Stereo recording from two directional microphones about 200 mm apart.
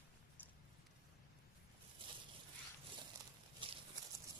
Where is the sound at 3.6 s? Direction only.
25° right (ahead or behind).